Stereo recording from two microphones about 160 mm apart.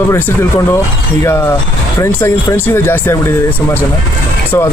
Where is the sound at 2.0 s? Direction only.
15° left (ahead or behind).